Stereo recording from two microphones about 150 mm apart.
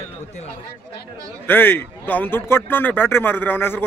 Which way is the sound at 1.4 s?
15° left (ahead or behind).